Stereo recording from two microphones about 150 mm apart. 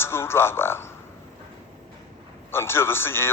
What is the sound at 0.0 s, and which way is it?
Speech, 15° left (ahead or behind).